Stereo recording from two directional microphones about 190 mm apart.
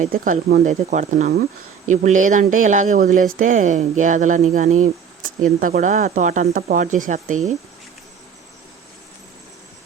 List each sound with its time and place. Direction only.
0.0 s speech: 45° right (ahead or behind)